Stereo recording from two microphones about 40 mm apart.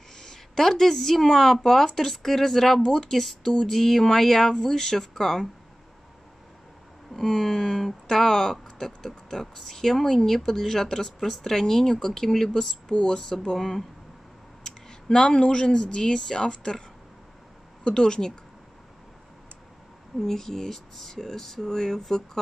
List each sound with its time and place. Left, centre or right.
0.1 s speech: centre
3.2 s speech: centre
7.2 s speech: centre
17.8 s speech: left
20.2 s speech: centre